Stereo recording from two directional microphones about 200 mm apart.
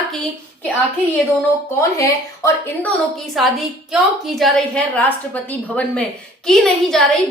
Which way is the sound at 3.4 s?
Centre (ahead or behind).